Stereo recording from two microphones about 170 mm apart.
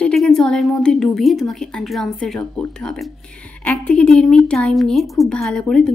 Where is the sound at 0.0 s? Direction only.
Centre (ahead or behind).